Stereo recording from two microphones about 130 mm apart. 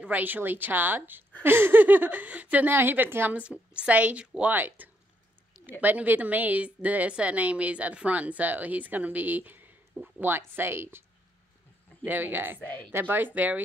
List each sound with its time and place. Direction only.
0.0 s a woman's voice: 15° right (ahead or behind)
12.5 s speech: 10° left (ahead or behind)
12.9 s a woman's voice: 15° right (ahead or behind)